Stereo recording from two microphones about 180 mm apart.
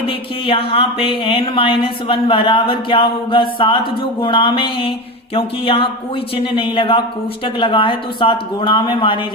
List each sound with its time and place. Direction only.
0.1 s speech: 30° left (ahead or behind)